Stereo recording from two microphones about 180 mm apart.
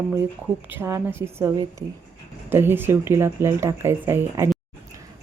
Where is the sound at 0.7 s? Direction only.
15° right (ahead or behind).